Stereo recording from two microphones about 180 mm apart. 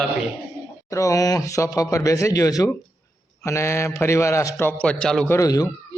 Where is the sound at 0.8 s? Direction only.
20° left (ahead or behind).